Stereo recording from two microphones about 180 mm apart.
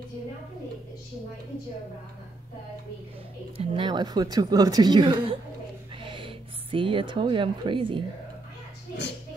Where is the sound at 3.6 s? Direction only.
30° right (ahead or behind).